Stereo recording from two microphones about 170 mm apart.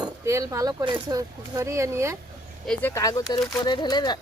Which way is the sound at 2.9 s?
20° left (ahead or behind).